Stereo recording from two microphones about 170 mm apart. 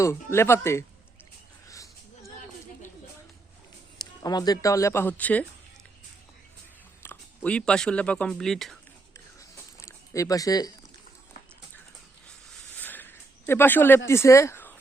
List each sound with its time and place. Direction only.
0.0 s speech: 15° left (ahead or behind)
1.6 s a sound: 20° left (ahead or behind)
3.9 s speech: 25° left (ahead or behind)
7.0 s speech: 10° left (ahead or behind)
9.8 s speech: 20° left (ahead or behind)
12.7 s a sound: 10° left (ahead or behind)